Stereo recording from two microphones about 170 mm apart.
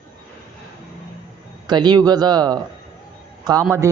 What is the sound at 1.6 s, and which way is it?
A man's voice, 25° right (ahead or behind).